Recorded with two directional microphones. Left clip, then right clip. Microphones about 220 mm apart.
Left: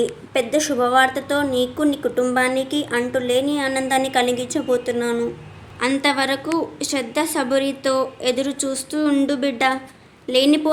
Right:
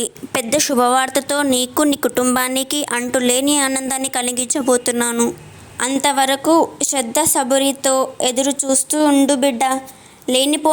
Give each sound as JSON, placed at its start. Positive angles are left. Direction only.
{"t": 0.3, "sound": "a woman's voice", "side_deg": -45}
{"t": 5.9, "sound": "a woman's voice", "side_deg": -35}